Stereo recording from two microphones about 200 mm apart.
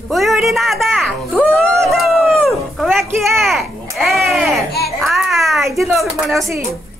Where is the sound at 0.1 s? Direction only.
Centre (ahead or behind).